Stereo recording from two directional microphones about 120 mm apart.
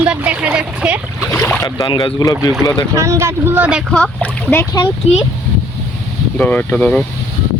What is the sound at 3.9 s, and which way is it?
Speech, 10° left (ahead or behind).